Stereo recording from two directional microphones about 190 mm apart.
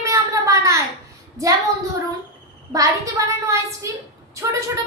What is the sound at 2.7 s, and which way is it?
A woman's voice, 15° right (ahead or behind).